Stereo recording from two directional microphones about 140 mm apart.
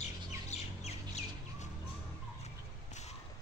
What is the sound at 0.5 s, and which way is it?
Squawk, 55° left (ahead or behind).